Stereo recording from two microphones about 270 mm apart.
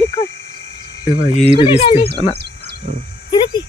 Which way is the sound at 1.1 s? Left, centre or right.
Centre.